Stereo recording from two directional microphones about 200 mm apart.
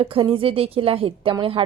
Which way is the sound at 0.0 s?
25° right (ahead or behind).